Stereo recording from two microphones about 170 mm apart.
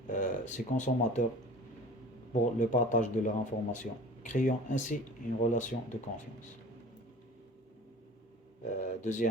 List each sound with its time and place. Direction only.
0.1 s speech: 45° left (ahead or behind)
2.3 s a man's voice: 50° left (ahead or behind)
8.8 s speech: 45° left (ahead or behind)